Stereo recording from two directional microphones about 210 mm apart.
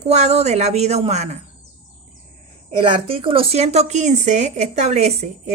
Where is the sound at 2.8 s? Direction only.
25° right (ahead or behind).